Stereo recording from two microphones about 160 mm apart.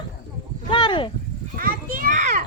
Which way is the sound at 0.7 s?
30° left (ahead or behind).